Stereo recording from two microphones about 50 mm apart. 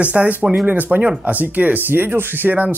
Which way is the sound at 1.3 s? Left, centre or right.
Right.